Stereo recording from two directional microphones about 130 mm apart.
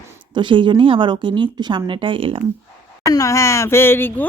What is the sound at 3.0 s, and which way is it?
Speech, 25° left (ahead or behind).